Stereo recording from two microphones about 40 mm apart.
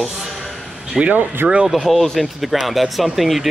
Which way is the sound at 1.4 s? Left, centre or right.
Right.